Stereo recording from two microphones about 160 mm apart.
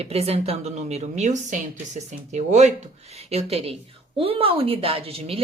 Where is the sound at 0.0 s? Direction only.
40° right (ahead or behind).